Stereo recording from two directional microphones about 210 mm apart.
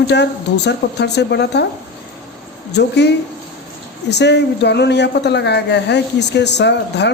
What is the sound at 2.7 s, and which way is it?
Speech, 55° left (ahead or behind).